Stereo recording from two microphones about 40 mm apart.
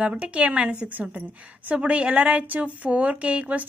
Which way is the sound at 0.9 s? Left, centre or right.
Right.